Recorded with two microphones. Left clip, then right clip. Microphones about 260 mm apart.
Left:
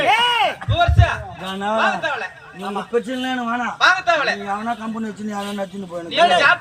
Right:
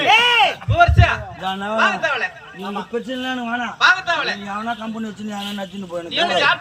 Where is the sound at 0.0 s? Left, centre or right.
Left.